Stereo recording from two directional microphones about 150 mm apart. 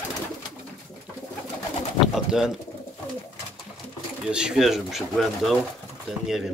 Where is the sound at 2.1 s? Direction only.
5° right (ahead or behind).